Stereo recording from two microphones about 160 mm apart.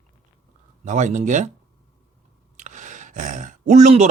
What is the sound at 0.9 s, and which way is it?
Speech, 50° right (ahead or behind).